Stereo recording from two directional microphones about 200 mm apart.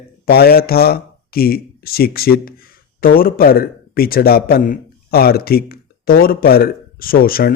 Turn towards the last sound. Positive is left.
turn(degrees=45)  # may be behind; listen again after turning